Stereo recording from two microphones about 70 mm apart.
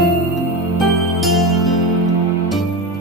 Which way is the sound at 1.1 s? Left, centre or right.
Centre.